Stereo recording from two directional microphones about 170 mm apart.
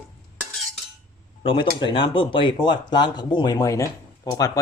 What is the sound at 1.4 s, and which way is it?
Speech, 30° left (ahead or behind).